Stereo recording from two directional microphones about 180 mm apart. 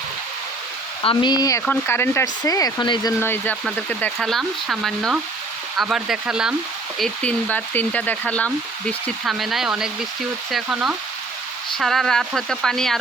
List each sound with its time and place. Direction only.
1.0 s speech: 25° left (ahead or behind); by 6.5 s 5° right (ahead or behind)
7.0 s speech: 5° left (ahead or behind)